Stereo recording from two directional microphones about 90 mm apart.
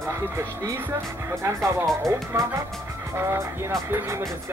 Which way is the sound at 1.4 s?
35° right (ahead or behind).